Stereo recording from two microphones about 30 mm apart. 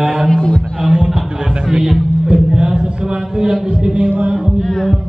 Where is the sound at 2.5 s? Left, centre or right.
Right.